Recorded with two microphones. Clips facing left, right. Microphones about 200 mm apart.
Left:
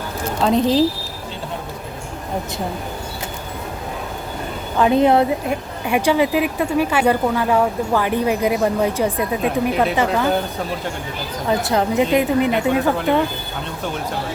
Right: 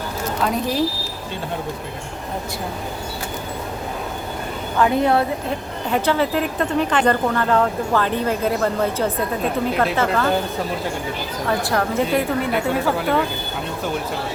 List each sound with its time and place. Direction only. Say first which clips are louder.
0.4 s a woman's voice: left 6 dB; 25° left (ahead or behind)
4.8 s speech: left 3 dB; 20° left (ahead or behind)
11.4 s a woman's voice: left 3 dB; 20° left (ahead or behind)